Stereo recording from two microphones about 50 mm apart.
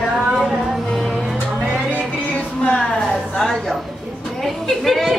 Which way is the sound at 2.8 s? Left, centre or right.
Centre.